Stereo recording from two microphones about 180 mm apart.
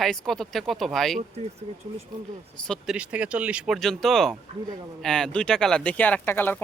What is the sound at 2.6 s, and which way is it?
Speech, centre (ahead or behind).